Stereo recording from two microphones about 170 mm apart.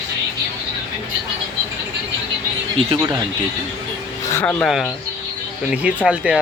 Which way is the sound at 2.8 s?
30° right (ahead or behind).